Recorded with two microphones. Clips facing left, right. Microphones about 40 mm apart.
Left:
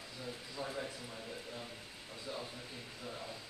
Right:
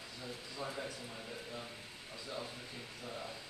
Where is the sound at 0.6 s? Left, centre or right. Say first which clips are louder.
Even; centre.